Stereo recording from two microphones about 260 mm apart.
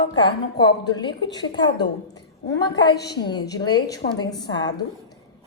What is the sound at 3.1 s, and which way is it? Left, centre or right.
A woman's voice, centre.